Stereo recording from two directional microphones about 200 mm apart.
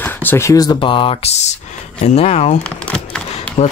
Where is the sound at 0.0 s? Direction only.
10° left (ahead or behind).